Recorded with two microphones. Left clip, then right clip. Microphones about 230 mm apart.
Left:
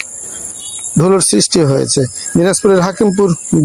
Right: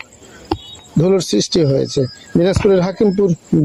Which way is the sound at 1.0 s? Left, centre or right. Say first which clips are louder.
Left 3 dB; centre.